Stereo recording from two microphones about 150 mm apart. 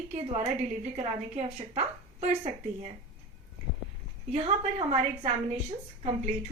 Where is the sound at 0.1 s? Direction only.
50° right (ahead or behind).